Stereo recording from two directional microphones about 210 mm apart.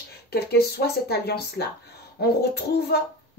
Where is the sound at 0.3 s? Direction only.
50° left (ahead or behind).